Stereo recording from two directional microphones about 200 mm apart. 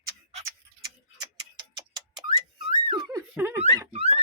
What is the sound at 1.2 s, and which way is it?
Tick-tock, 20° right (ahead or behind).